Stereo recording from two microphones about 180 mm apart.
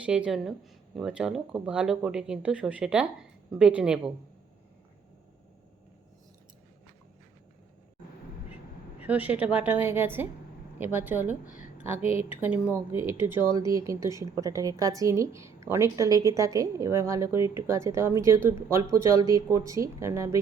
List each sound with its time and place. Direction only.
0.0 s speech: 5° right (ahead or behind)
9.0 s speech: 10° right (ahead or behind)